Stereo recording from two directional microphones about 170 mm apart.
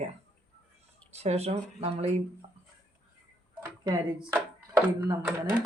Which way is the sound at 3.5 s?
20° right (ahead or behind).